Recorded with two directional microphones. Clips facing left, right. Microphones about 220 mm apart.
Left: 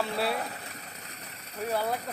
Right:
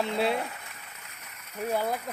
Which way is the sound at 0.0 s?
20° right (ahead or behind).